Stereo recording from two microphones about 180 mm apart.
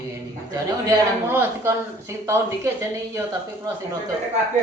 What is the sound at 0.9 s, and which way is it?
A man's voice, 15° right (ahead or behind).